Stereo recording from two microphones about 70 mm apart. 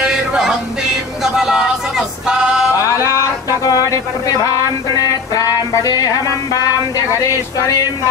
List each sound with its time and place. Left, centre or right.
0.0 s music: centre
1.2 s vehicle: centre
3.1 s a sound: left
4.3 s speech: left
5.3 s music: left